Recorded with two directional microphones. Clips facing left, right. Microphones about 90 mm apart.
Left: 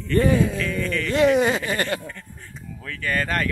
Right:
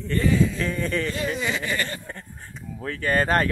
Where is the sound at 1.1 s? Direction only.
70° left (ahead or behind).